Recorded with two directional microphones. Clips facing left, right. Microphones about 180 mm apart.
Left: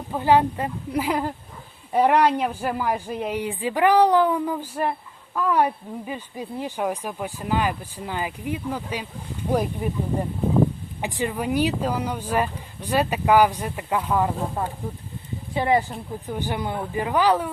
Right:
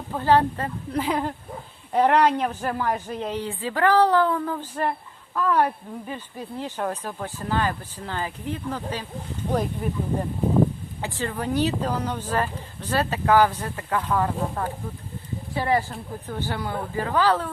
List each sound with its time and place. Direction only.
0.2 s speech: 15° left (ahead or behind)
11.0 s speech: 15° left (ahead or behind)